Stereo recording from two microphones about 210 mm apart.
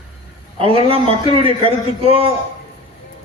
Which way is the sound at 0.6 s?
25° right (ahead or behind).